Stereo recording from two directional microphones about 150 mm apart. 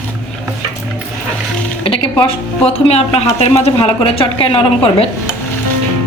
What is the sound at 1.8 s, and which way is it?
A woman's voice, 35° left (ahead or behind).